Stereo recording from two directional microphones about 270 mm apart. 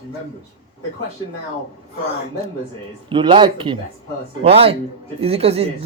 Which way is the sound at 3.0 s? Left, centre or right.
Centre.